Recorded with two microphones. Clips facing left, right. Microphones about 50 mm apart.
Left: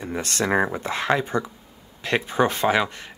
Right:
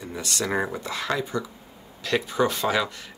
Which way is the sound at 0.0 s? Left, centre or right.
Left.